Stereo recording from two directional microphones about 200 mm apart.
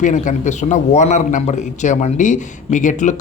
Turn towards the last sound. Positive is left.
turn(degrees=40)  # may be behind; listen again after turning